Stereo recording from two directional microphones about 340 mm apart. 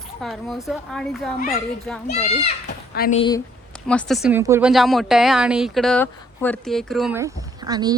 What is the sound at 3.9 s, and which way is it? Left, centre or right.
Speech, centre.